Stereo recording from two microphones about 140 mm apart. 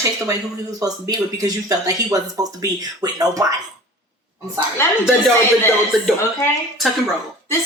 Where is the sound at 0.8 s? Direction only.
25° right (ahead or behind).